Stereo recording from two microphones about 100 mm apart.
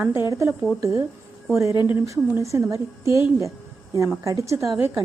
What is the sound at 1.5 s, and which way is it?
A woman's voice, 30° right (ahead or behind).